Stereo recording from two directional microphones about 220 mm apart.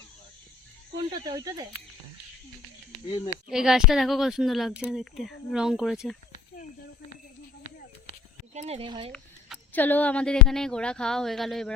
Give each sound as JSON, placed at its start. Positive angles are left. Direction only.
{"t": 0.9, "sound": "speech", "side_deg": -20}
{"t": 3.5, "sound": "speech", "side_deg": -5}
{"t": 6.3, "sound": "snake", "side_deg": 35}
{"t": 7.6, "sound": "a sound", "side_deg": 40}
{"t": 8.5, "sound": "speech", "side_deg": -30}
{"t": 9.1, "sound": "speech", "side_deg": 5}